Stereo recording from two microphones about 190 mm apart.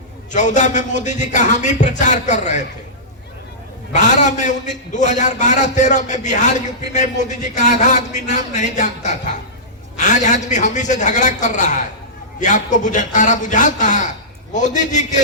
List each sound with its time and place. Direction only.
0.3 s a man's voice: 40° left (ahead or behind)
3.9 s a man's voice: 40° left (ahead or behind)
10.0 s a man's voice: 40° left (ahead or behind)